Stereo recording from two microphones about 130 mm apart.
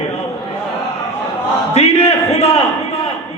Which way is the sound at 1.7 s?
55° left (ahead or behind).